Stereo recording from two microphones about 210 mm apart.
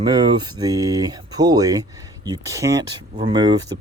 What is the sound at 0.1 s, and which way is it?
Speech, 20° right (ahead or behind).